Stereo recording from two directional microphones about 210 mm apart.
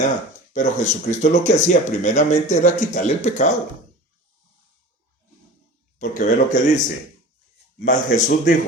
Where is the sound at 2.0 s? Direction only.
35° left (ahead or behind).